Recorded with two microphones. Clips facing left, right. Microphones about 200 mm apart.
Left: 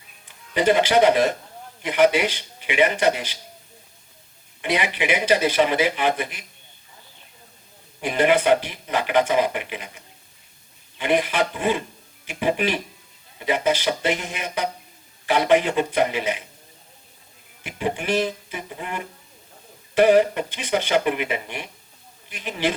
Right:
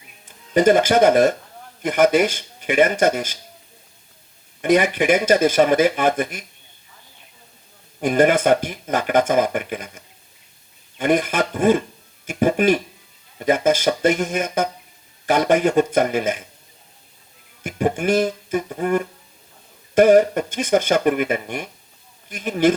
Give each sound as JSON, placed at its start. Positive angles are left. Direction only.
{"t": 0.5, "sound": "speech", "side_deg": -45}
{"t": 4.6, "sound": "speech", "side_deg": -45}
{"t": 8.0, "sound": "speech", "side_deg": -45}
{"t": 17.6, "sound": "speech", "side_deg": -45}